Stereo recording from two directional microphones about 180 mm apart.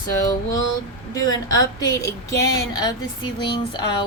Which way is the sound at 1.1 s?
20° left (ahead or behind).